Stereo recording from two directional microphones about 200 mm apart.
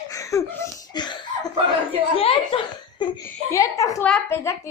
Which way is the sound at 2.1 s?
25° left (ahead or behind).